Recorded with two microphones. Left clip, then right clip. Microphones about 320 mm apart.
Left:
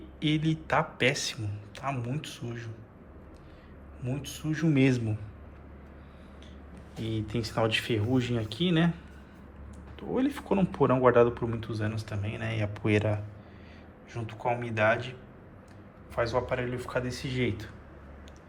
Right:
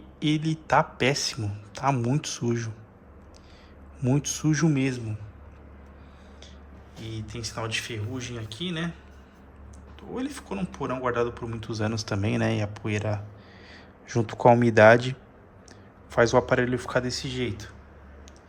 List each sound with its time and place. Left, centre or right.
0.2 s speech: centre
4.0 s speech: right
4.7 s speech: centre
7.0 s speech: centre
10.0 s speech: centre
11.7 s speech: centre
14.1 s speech: right
16.1 s speech: right